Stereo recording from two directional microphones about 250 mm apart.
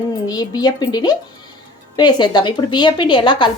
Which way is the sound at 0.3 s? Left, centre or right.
Centre.